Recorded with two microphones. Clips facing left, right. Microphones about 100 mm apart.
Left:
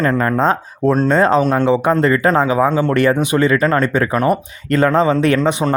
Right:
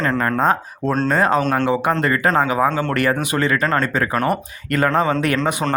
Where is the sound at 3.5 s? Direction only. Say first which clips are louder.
Left 4 dB; 30° right (ahead or behind).